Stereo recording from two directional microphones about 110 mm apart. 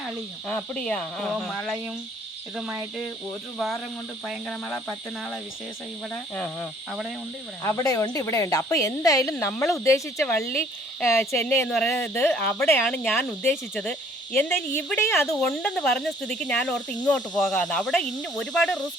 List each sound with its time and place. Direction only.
0.4 s speech: 10° left (ahead or behind)
6.3 s speech: 15° left (ahead or behind)
7.6 s speech: 25° left (ahead or behind)
9.4 s speech: 15° left (ahead or behind)
9.6 s speech: 25° left (ahead or behind)
15.4 s speech: 5° left (ahead or behind)